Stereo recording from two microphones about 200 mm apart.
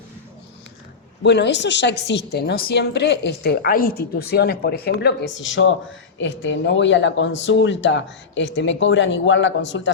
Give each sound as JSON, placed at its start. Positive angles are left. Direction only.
{"t": 1.2, "sound": "a woman's voice", "side_deg": 60}